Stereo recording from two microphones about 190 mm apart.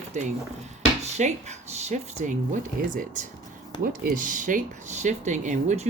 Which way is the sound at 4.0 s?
45° right (ahead or behind).